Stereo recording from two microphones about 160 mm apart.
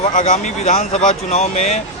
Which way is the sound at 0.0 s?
50° left (ahead or behind).